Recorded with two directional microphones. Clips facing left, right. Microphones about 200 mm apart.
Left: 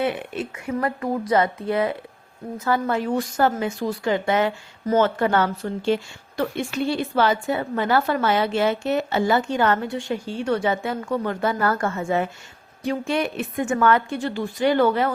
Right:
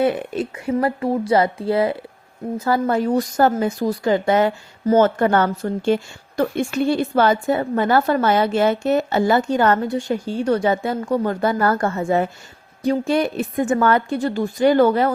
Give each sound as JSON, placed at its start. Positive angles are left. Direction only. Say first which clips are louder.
{"t": 0.0, "sound": "a woman's voice", "louder": "right 5 dB", "side_deg": -40}